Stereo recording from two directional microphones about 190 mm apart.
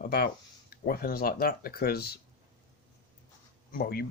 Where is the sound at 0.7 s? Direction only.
50° left (ahead or behind).